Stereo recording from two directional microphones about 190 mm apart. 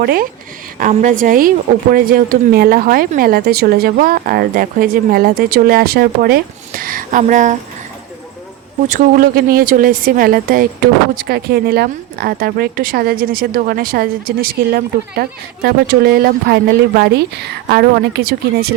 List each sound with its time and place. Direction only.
0.0 s speech: 50° right (ahead or behind)
8.9 s speech: 45° right (ahead or behind)